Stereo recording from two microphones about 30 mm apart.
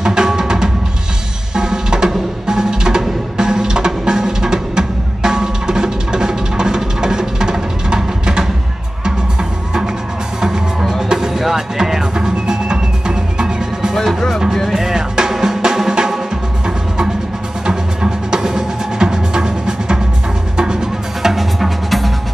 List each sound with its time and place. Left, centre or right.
0.0 s music: right
11.1 s music: centre
14.7 s drum: centre
15.4 s music: centre
17.6 s music: right
21.2 s music: centre
21.5 s music: centre